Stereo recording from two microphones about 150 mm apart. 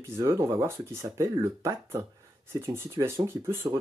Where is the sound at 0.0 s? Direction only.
15° right (ahead or behind).